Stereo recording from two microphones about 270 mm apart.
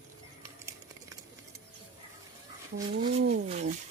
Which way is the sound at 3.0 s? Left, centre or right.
Right.